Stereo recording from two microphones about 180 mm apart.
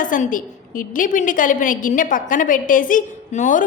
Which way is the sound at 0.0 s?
45° left (ahead or behind).